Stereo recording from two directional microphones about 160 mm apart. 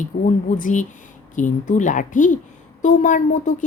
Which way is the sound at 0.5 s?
55° left (ahead or behind).